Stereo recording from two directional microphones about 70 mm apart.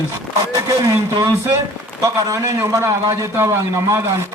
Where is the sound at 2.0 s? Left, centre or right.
Right.